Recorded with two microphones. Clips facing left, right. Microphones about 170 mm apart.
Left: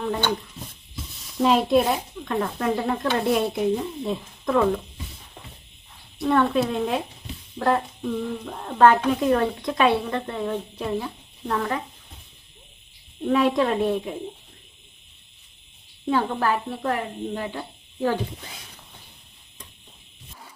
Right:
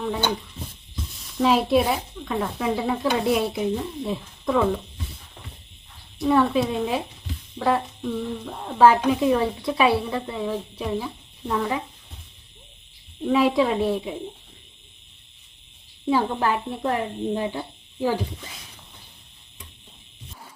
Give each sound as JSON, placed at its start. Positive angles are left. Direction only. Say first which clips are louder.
{"t": 0.0, "sound": "speech", "louder": "even", "side_deg": -5}
{"t": 6.1, "sound": "speech", "louder": "right 1 dB", "side_deg": 0}
{"t": 8.4, "sound": "speech", "louder": "even", "side_deg": -5}
{"t": 13.2, "sound": "speech", "louder": "right 1 dB", "side_deg": -5}
{"t": 16.0, "sound": "speech", "louder": "right 1 dB", "side_deg": -10}